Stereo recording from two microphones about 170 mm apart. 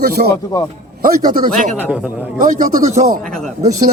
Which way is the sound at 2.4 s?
55° right (ahead or behind).